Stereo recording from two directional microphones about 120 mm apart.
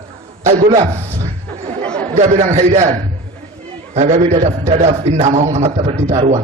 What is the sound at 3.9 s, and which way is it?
A man's voice, 70° right (ahead or behind).